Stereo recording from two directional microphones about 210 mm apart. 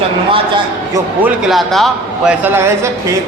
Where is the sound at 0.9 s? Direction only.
10° right (ahead or behind).